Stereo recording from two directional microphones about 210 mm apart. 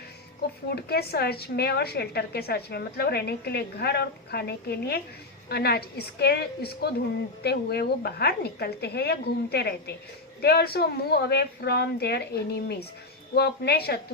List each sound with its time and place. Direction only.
0.7 s a woman's voice: 50° left (ahead or behind)